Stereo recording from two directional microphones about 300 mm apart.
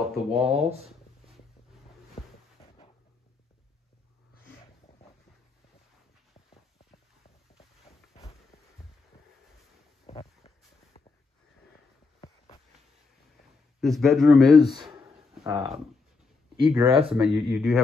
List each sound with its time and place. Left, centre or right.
0.0 s speech: centre
0.5 s speech: centre
2.1 s a sound: centre
7.5 s a sound: left
10.0 s vehicle: centre
13.7 s speech: centre
14.5 s speech: centre
17.1 s speech: centre